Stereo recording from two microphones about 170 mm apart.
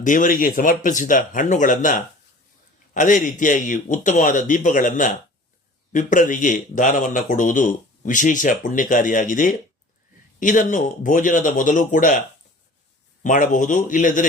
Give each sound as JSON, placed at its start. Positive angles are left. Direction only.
{"t": 0.0, "sound": "a man's voice", "side_deg": 50}
{"t": 13.2, "sound": "a man's voice", "side_deg": 50}